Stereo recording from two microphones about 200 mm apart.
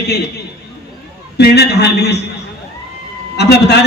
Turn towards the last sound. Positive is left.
turn(degrees=55)  # may be behind; listen again after turning